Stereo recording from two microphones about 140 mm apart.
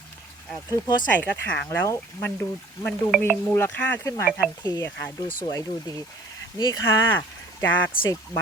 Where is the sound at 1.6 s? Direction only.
20° left (ahead or behind).